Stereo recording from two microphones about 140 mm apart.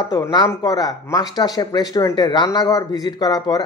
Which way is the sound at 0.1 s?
30° left (ahead or behind).